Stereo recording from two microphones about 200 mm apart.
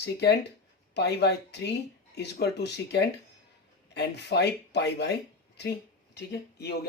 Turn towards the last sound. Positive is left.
turn(degrees=55)  # may be behind; listen again after turning